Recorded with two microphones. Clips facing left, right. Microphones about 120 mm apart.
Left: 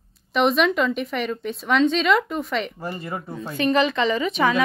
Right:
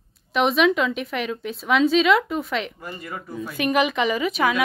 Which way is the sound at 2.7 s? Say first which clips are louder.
Left 4 dB; 30° left (ahead or behind).